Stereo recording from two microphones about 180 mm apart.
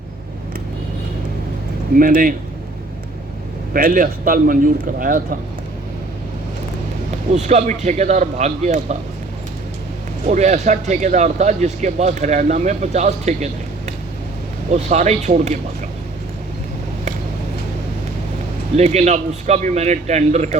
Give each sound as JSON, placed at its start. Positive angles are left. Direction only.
{"t": 2.0, "sound": "speech", "side_deg": -50}
{"t": 3.7, "sound": "speech", "side_deg": -50}
{"t": 7.3, "sound": "speech", "side_deg": -40}
{"t": 10.2, "sound": "speech", "side_deg": -40}
{"t": 14.7, "sound": "speech", "side_deg": -40}
{"t": 18.8, "sound": "speech", "side_deg": -40}